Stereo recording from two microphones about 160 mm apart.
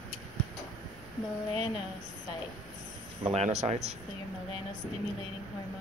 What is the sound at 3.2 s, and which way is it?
Speech, 40° right (ahead or behind).